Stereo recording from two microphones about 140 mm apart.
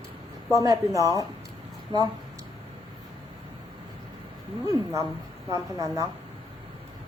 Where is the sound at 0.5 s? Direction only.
25° right (ahead or behind).